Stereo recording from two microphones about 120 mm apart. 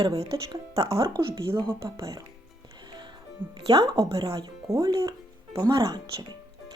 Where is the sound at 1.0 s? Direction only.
45° right (ahead or behind).